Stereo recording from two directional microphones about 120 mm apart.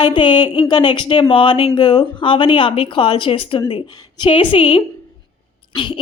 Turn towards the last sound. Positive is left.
turn(degrees=45)  # may be behind; listen again after turning